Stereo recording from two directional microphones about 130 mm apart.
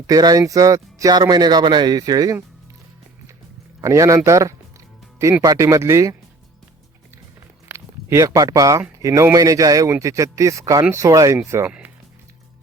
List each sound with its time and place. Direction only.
0.1 s speech: 30° right (ahead or behind)
3.8 s speech: 25° right (ahead or behind)
7.7 s speech: 20° right (ahead or behind)